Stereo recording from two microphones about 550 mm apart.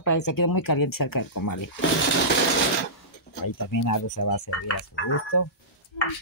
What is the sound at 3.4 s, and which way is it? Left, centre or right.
Speech, left.